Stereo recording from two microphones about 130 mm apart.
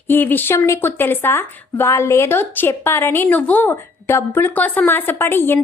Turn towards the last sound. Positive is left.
turn(degrees=15)  # may be behind; listen again after turning